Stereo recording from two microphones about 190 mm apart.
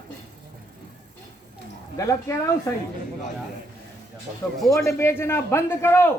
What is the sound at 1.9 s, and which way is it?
Speech, 15° left (ahead or behind).